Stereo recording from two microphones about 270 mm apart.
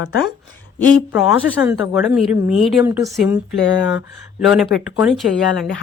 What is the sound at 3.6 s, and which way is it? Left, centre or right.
Speech, left.